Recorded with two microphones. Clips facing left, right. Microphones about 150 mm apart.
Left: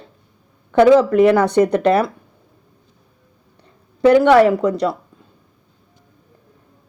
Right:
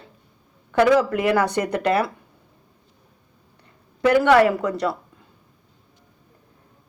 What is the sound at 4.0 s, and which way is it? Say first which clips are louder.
Speech: left 5 dB; 25° left (ahead or behind).